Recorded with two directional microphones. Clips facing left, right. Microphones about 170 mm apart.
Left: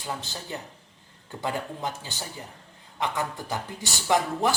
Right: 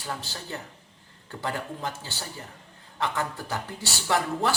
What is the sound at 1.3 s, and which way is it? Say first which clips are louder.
Speech: left 1 dB; 15° left (ahead or behind).